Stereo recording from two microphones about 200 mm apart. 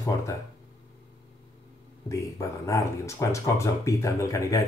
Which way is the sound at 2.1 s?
15° left (ahead or behind).